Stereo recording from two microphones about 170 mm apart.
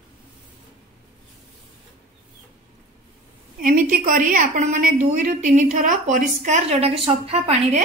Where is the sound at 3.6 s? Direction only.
50° right (ahead or behind).